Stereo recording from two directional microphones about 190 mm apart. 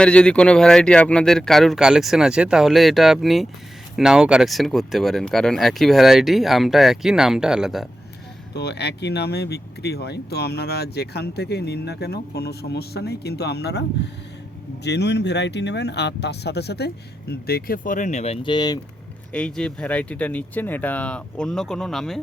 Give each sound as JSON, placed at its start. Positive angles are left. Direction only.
{"t": 0.0, "sound": "speech", "side_deg": 5}
{"t": 8.5, "sound": "speech", "side_deg": 60}
{"t": 14.8, "sound": "speech", "side_deg": 65}
{"t": 19.3, "sound": "speech", "side_deg": 5}